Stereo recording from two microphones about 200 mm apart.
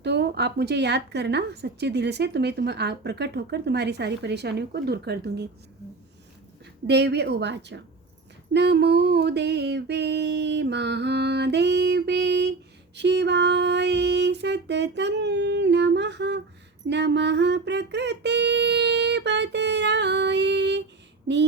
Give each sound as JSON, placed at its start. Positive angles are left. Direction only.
{"t": 0.0, "sound": "a woman's voice", "side_deg": -55}
{"t": 6.8, "sound": "a woman's voice", "side_deg": -55}